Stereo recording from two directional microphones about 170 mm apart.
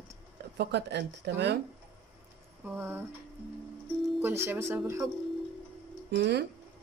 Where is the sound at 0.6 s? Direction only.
75° right (ahead or behind).